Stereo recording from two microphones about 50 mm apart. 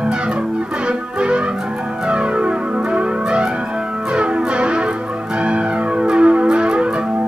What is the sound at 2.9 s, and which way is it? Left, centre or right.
Music, right.